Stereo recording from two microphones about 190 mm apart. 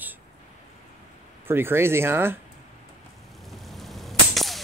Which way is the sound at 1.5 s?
10° right (ahead or behind).